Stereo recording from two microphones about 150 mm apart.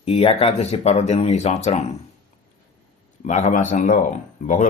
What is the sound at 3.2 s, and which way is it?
Speech, 50° left (ahead or behind).